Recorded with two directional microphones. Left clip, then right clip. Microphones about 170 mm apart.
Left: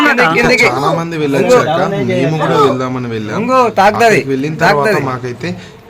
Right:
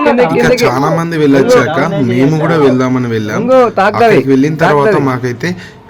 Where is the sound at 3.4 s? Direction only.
60° right (ahead or behind).